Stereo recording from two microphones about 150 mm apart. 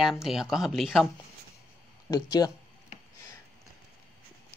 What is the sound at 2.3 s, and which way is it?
Speech, 25° left (ahead or behind).